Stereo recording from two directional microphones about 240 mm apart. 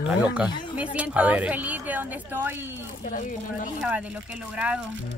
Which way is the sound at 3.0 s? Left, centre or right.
Left.